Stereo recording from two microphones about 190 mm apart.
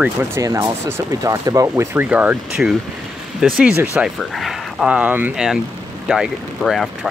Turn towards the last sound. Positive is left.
turn(degrees=0)  # may be behind; listen again after turning